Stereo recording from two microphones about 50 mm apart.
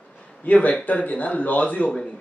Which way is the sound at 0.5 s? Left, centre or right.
Left.